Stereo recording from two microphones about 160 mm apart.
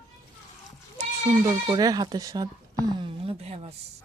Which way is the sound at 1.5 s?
25° right (ahead or behind).